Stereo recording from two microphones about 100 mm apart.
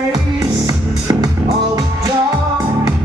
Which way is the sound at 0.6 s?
40° right (ahead or behind).